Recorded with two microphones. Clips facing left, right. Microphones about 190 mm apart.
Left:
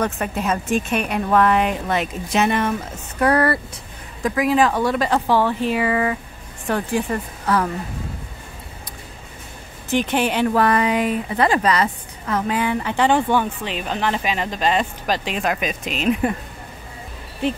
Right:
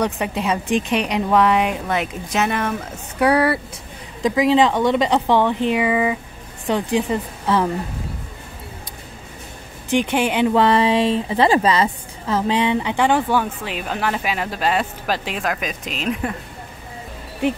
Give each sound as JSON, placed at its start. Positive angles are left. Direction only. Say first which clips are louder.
{"t": 0.0, "sound": "a woman's voice", "louder": "right 1 dB", "side_deg": -15}
{"t": 4.2, "sound": "a woman's voice", "louder": "right 2 dB", "side_deg": -20}
{"t": 9.8, "sound": "a woman's voice", "louder": "right 1 dB", "side_deg": -15}